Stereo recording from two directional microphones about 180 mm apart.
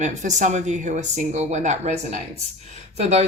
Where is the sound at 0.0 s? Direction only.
40° right (ahead or behind).